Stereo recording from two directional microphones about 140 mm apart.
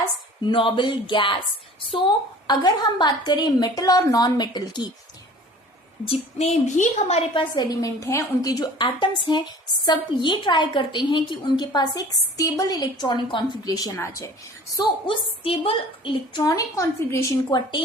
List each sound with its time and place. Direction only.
0.4 s a woman's voice: 35° left (ahead or behind)
2.5 s a woman's voice: 30° left (ahead or behind)
6.1 s a woman's voice: 50° left (ahead or behind)
7.5 s a woman's voice: 30° left (ahead or behind)
15.0 s a woman's voice: 40° left (ahead or behind); by 17.3 s 20° left (ahead or behind)
17.5 s a woman's voice: 35° left (ahead or behind)